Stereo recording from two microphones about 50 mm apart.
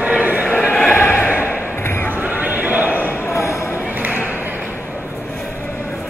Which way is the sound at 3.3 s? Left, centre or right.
Left.